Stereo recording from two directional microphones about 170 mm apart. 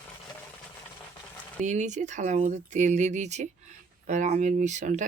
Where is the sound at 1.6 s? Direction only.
45° right (ahead or behind).